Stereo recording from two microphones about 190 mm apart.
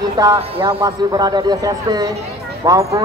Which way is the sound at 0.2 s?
20° right (ahead or behind).